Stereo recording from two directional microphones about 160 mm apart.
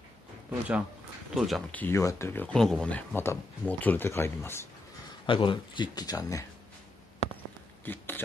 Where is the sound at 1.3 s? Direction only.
Centre (ahead or behind).